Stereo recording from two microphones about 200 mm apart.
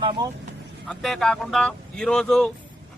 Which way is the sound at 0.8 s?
Centre (ahead or behind).